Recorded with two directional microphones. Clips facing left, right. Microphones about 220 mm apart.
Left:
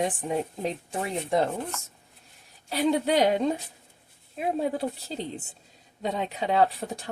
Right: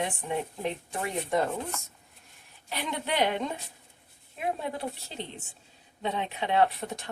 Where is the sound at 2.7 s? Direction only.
35° left (ahead or behind).